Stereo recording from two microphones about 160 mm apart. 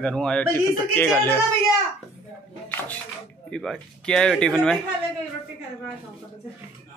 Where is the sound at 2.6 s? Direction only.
10° left (ahead or behind).